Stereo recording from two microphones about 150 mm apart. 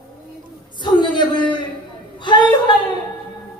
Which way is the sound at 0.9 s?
30° left (ahead or behind).